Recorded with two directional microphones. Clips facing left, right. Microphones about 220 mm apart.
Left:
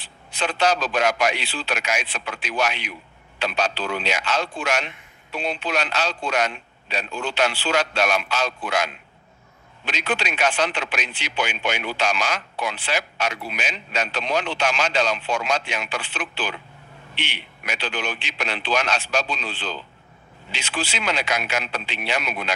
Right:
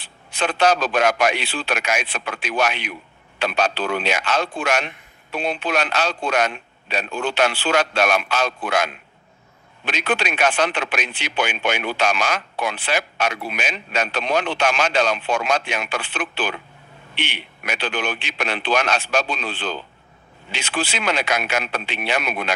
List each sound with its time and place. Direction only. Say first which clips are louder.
0.0 s speech: right 3 dB; 55° right (ahead or behind)